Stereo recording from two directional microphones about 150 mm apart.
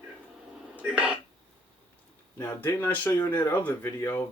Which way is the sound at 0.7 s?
10° right (ahead or behind).